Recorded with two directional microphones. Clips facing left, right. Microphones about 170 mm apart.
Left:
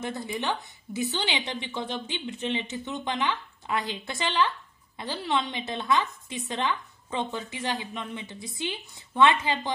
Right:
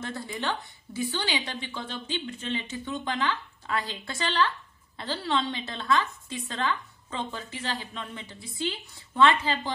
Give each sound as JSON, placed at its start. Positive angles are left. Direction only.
{"t": 0.0, "sound": "a woman's voice", "side_deg": 20}